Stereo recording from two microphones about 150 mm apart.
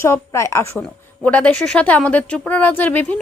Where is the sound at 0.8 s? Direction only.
10° left (ahead or behind).